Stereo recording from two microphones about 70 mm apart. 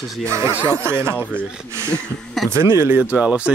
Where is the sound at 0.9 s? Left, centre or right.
Right.